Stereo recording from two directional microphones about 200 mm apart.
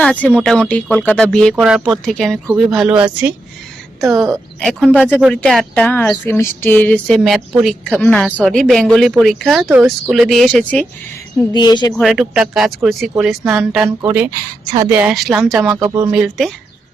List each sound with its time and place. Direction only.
0.0 s speech: 5° left (ahead or behind)
11.5 s speech: 20° left (ahead or behind)
11.9 s speech: centre (ahead or behind)
14.6 s speech: 20° right (ahead or behind)
14.8 s speech: 10° right (ahead or behind)